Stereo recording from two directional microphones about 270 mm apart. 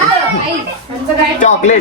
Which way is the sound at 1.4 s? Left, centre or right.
Left.